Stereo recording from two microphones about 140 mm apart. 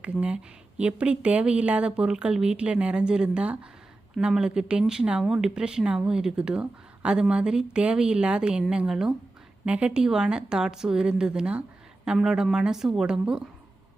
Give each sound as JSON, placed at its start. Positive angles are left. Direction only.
{"t": 0.0, "sound": "a woman's voice", "side_deg": -10}